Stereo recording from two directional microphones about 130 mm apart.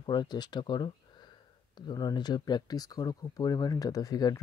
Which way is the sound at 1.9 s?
30° left (ahead or behind).